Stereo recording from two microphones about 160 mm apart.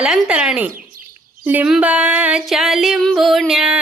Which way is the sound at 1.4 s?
10° right (ahead or behind).